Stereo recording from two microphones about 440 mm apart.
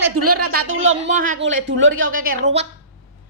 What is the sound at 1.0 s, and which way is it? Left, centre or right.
A woman's voice, centre.